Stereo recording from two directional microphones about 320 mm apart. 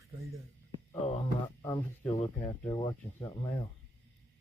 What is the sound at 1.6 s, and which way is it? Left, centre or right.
Speech, centre.